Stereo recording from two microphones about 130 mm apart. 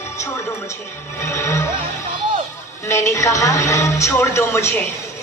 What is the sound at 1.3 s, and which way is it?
Speech, 20° left (ahead or behind).